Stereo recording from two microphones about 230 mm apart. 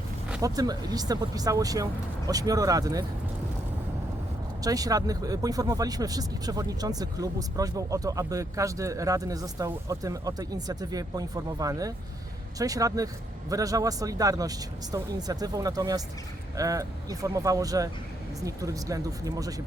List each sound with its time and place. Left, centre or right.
0.4 s speech: centre
4.6 s speech: centre